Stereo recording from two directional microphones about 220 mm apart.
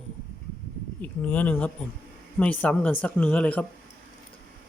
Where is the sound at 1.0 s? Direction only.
5° left (ahead or behind).